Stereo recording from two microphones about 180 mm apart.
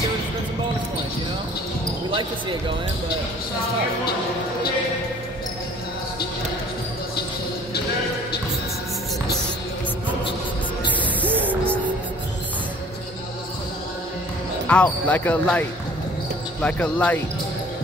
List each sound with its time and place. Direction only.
11.2 s music: 10° right (ahead or behind)
14.7 s speech: 5° left (ahead or behind)
16.6 s speech: 5° left (ahead or behind)